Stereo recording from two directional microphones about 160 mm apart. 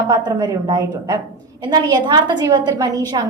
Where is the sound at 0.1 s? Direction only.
25° right (ahead or behind).